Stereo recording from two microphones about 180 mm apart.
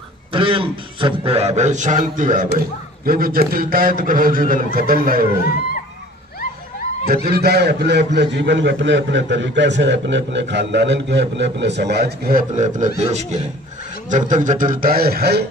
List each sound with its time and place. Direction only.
0.3 s a man's voice: 30° right (ahead or behind); by 5.2 s 55° right (ahead or behind)
7.2 s a man's voice: 60° right (ahead or behind)